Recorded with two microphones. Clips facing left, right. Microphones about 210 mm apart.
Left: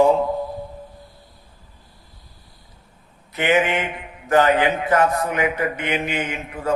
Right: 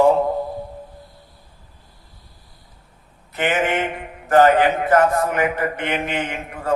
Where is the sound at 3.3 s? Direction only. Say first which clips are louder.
Left 1 dB; 50° right (ahead or behind).